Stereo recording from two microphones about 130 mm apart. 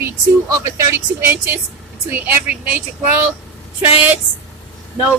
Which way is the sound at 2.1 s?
15° right (ahead or behind).